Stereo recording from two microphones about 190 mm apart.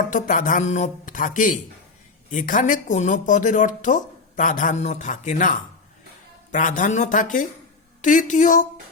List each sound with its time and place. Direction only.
0.0 s speech: 45° left (ahead or behind)